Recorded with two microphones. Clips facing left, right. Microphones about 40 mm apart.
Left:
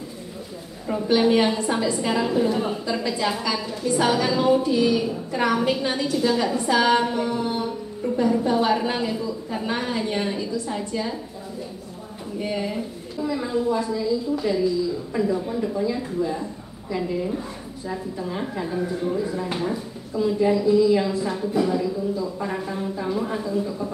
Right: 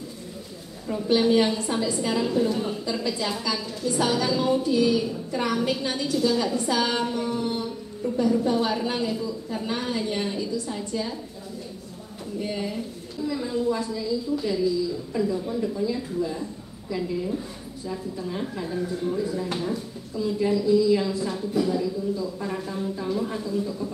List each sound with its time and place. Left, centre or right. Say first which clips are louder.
0.8 s a woman's voice: left 2 dB; left
12.4 s a woman's voice: left 3 dB; centre